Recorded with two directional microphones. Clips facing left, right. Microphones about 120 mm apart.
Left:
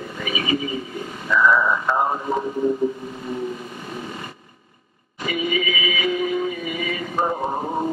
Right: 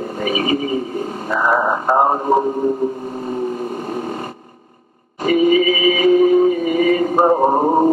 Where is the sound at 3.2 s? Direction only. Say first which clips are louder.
Right 7 dB; 45° right (ahead or behind).